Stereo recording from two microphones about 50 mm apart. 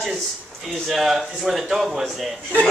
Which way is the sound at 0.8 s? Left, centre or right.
Centre.